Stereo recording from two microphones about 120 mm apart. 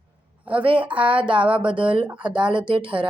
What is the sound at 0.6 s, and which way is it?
Speech, 45° right (ahead or behind).